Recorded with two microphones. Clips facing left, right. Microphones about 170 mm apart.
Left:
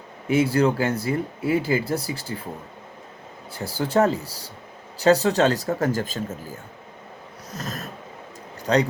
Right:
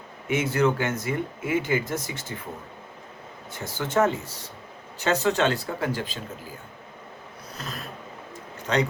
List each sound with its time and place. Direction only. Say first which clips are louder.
0.3 s speech: left 4 dB; 35° left (ahead or behind)
3.5 s speech: left 4 dB; 35° left (ahead or behind)
7.5 s snort: left 4 dB; 40° left (ahead or behind)
8.6 s a man's voice: left 4 dB; 35° left (ahead or behind)